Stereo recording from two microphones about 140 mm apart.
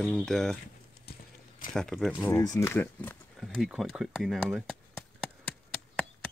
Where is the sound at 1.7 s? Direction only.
5° left (ahead or behind).